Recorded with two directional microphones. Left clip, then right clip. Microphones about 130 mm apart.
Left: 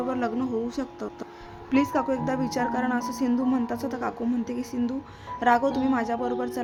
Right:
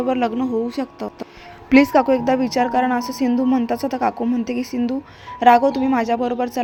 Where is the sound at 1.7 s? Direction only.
40° right (ahead or behind).